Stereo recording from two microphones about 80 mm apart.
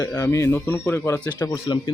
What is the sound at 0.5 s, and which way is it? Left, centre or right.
Speech, left.